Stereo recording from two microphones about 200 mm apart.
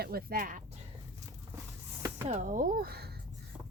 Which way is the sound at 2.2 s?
40° right (ahead or behind).